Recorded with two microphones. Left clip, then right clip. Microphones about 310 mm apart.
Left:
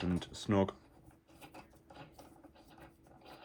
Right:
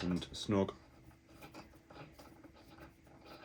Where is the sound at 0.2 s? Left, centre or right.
Left.